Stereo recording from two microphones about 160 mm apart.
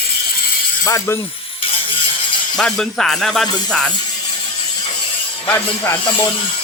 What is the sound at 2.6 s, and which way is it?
Speech, 5° left (ahead or behind).